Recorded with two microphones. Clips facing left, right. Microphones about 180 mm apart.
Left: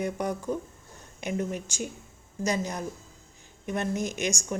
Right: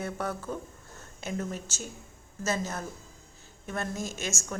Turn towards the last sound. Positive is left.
turn(degrees=15)  # may be behind; listen again after turning